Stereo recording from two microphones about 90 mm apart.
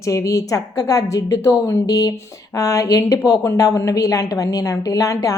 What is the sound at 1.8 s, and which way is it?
A woman's voice, 45° left (ahead or behind).